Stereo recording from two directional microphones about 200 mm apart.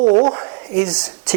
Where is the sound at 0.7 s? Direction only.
10° right (ahead or behind).